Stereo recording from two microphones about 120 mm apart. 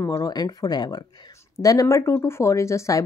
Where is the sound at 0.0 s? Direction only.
30° left (ahead or behind).